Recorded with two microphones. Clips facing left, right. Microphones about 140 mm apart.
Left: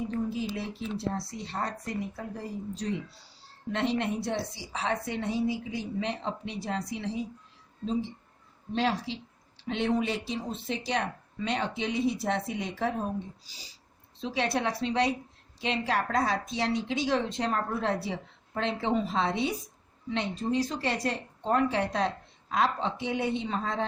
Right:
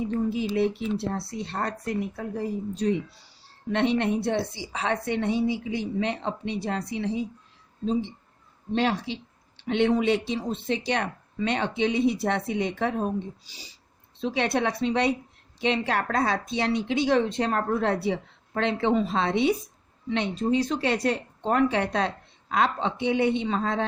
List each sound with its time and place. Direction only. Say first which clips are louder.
0.3 s a woman's voice: right 8 dB; 65° right (ahead or behind)
8.7 s a woman's voice: right 3 dB; 65° right (ahead or behind)